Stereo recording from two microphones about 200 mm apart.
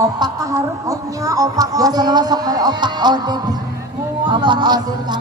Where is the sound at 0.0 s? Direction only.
15° right (ahead or behind).